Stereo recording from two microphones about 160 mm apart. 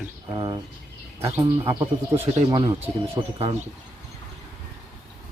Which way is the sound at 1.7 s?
35° right (ahead or behind).